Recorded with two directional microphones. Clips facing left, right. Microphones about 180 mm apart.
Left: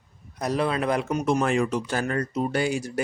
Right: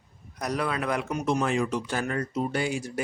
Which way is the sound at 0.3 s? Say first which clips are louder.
Left 4 dB; 30° left (ahead or behind).